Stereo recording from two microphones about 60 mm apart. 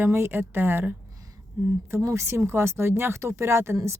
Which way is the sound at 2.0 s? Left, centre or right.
Right.